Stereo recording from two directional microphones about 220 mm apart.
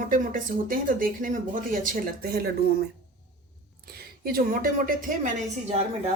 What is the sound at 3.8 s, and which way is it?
A woman's voice, 45° right (ahead or behind).